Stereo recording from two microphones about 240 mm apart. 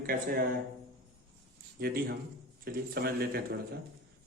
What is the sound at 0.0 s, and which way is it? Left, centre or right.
Speech, right.